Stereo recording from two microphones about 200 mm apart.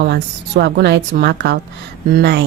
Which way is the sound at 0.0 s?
60° right (ahead or behind).